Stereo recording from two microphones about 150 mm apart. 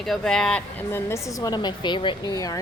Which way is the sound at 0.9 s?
15° left (ahead or behind).